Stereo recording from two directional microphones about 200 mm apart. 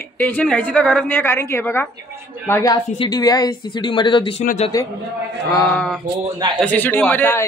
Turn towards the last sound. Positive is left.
turn(degrees=10)  # may be behind; listen again after turning